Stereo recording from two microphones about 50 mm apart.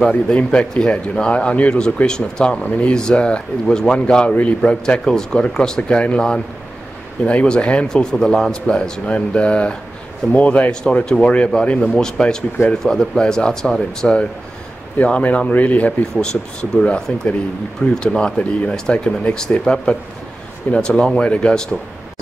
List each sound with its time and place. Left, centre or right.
0.1 s a man's voice: left
12.0 s speech: centre
15.0 s speech: left
16.2 s a man's voice: centre